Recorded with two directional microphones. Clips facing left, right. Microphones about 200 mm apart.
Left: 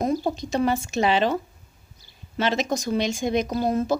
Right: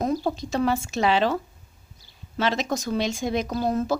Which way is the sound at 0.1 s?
15° left (ahead or behind).